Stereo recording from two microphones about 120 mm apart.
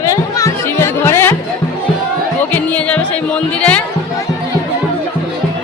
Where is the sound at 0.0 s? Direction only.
25° left (ahead or behind).